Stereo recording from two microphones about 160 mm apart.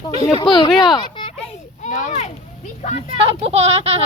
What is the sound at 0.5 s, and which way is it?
Speech, centre (ahead or behind).